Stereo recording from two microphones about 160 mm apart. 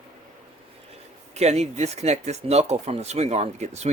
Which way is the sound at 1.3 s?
45° right (ahead or behind).